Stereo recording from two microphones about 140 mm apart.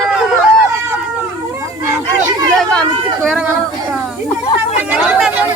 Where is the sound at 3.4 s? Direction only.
10° right (ahead or behind).